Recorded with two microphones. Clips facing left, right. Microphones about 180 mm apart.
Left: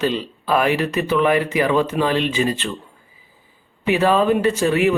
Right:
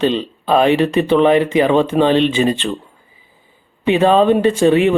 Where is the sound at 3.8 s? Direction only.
25° right (ahead or behind).